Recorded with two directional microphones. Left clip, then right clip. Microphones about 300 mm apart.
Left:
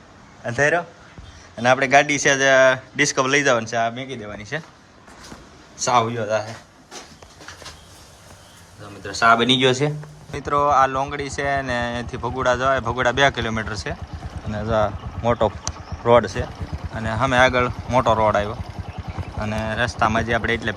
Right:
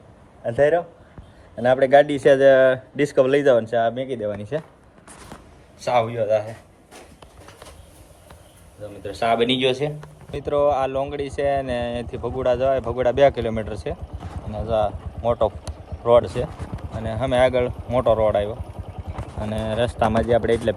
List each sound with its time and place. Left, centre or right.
0.4 s speech: centre
5.9 s speech: left
6.1 s speech: centre
9.3 s speech: left
10.3 s speech: centre
15.3 s speech: centre